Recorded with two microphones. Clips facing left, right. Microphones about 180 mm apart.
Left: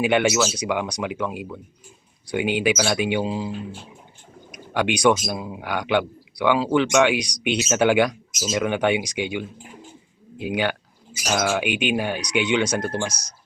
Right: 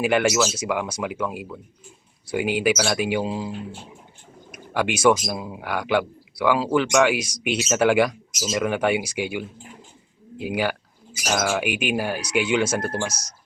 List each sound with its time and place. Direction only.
0.0 s speech: centre (ahead or behind)
4.7 s speech: 5° right (ahead or behind)